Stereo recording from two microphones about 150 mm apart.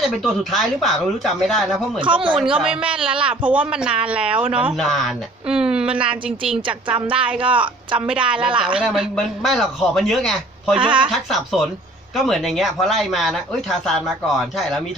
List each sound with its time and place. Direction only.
0.0 s a man's voice: centre (ahead or behind)
2.0 s a woman's voice: 35° right (ahead or behind)
2.6 s a man's voice: 5° right (ahead or behind)
6.5 s a woman's voice: 35° right (ahead or behind)
6.9 s a man's voice: 10° right (ahead or behind)
10.8 s a woman's voice: 35° right (ahead or behind)
11.1 s a man's voice: centre (ahead or behind)